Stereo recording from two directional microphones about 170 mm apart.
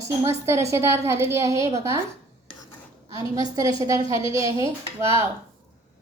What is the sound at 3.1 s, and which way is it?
A woman's voice, 20° right (ahead or behind).